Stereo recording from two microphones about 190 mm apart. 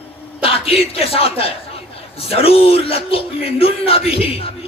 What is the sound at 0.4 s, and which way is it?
Speech, 30° left (ahead or behind).